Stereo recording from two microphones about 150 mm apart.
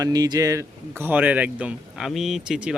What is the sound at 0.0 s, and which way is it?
Speech, 25° right (ahead or behind).